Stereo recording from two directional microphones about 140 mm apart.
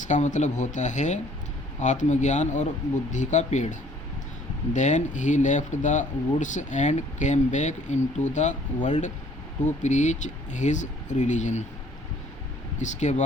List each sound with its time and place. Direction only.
0.0 s speech: 60° left (ahead or behind)
12.8 s speech: 60° left (ahead or behind)